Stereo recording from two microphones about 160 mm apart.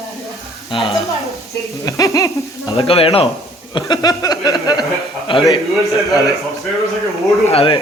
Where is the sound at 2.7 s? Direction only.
35° left (ahead or behind).